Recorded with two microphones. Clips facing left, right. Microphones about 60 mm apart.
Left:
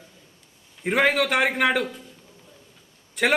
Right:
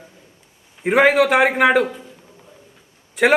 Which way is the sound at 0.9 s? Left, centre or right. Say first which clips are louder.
Right 7 dB; centre.